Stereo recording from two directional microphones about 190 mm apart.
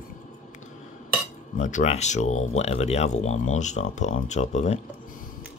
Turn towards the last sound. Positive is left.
turn(degrees=35)  # may be behind; listen again after turning